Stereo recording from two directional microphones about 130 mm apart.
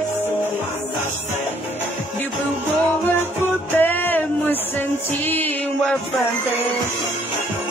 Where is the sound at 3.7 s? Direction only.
15° left (ahead or behind).